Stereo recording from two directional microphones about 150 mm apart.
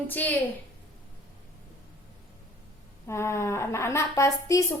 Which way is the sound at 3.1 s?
15° left (ahead or behind).